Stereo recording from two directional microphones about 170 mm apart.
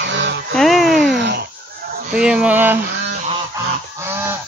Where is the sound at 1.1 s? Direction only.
90° right.